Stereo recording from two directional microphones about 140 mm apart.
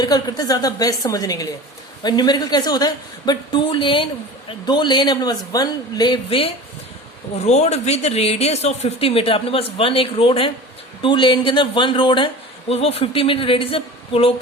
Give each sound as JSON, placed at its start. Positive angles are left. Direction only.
{"t": 0.0, "sound": "a woman's voice", "side_deg": 30}
{"t": 7.3, "sound": "speech", "side_deg": 50}